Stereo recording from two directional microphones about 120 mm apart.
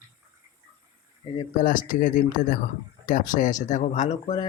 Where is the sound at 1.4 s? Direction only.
90° left.